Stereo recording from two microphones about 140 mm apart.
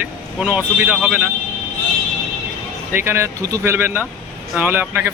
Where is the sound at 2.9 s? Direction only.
15° right (ahead or behind).